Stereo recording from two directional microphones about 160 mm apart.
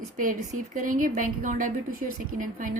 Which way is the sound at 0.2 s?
55° right (ahead or behind).